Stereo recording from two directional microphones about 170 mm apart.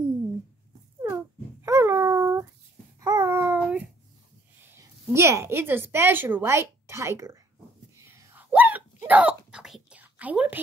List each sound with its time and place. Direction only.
1.0 s a sound: 15° right (ahead or behind)
3.0 s babbling: 20° right (ahead or behind)
4.6 s a woman's voice: 15° right (ahead or behind)
7.9 s hiccup: 15° right (ahead or behind)